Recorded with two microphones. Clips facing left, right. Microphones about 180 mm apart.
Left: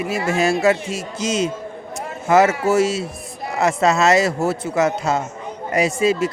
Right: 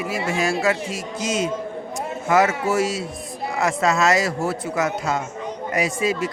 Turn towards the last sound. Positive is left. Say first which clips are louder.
# left 4 dB
turn(degrees=25)  # may be behind; listen again after turning